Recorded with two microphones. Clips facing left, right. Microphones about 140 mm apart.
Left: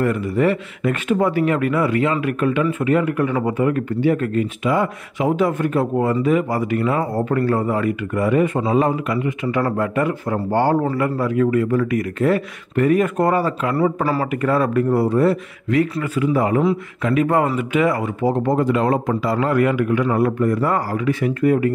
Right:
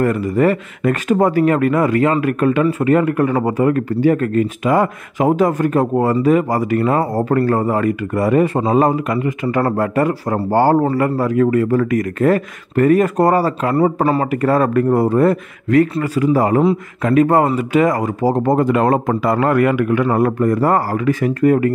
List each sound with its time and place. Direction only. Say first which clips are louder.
0.0 s a man's voice: right 3 dB; 45° right (ahead or behind)
14.0 s speech: right 4 dB; 25° right (ahead or behind)
14.4 s a man's voice: right 3 dB; 45° right (ahead or behind)